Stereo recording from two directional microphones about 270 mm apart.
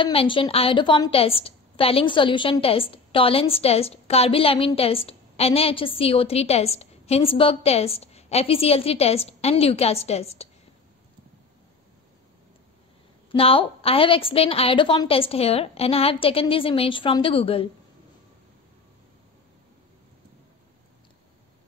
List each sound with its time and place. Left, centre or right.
0.0 s a woman's voice: centre
13.3 s a woman's voice: centre